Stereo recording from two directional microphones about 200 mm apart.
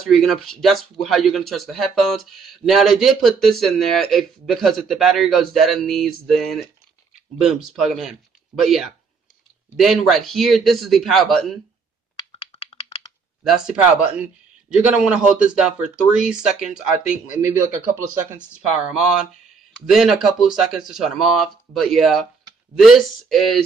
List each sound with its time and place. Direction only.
0.0 s speech: centre (ahead or behind)
12.4 s a sound: 30° left (ahead or behind)
13.4 s speech: centre (ahead or behind)
18.9 s speech: 5° right (ahead or behind)